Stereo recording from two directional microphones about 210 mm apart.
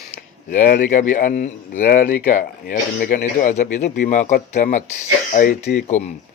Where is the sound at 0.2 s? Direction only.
40° left (ahead or behind).